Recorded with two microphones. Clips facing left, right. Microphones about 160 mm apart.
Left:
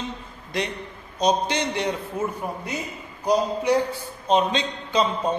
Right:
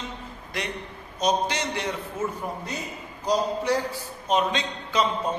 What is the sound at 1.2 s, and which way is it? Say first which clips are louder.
A man's voice: left 3 dB; 20° left (ahead or behind).